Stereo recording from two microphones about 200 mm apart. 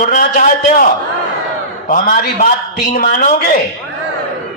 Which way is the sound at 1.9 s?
45° left (ahead or behind).